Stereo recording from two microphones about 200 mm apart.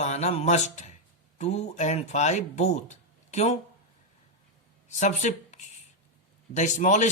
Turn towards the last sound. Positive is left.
turn(degrees=35)  # may be behind; listen again after turning